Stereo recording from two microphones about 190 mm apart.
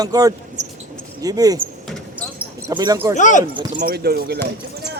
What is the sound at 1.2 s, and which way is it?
Speech, 20° right (ahead or behind).